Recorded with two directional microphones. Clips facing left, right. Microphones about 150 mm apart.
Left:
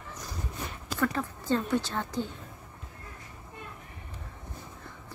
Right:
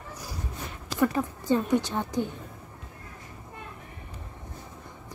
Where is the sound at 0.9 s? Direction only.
15° right (ahead or behind).